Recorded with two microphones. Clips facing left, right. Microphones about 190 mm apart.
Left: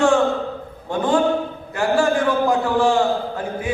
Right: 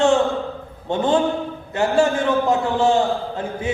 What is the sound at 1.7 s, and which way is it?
A man's voice, 25° right (ahead or behind).